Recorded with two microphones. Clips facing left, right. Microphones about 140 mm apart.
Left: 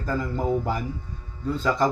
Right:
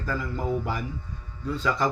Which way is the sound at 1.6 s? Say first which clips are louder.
Left 3 dB; 40° left (ahead or behind).